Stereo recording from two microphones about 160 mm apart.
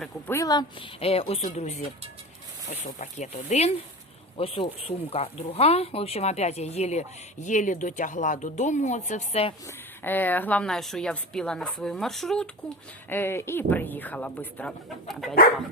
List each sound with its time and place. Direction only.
0.3 s a woman's voice: 20° left (ahead or behind)
0.9 s speech: 35° left (ahead or behind)
10.0 s a woman's voice: 10° left (ahead or behind)